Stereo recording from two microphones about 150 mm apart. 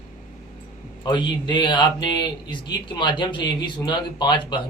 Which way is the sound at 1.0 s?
30° left (ahead or behind).